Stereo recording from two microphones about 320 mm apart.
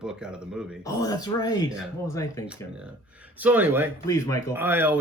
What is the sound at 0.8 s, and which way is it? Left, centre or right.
Speech, centre.